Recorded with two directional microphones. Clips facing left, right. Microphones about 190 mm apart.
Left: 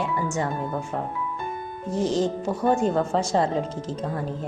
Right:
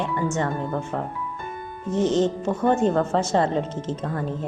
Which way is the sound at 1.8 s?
35° left (ahead or behind).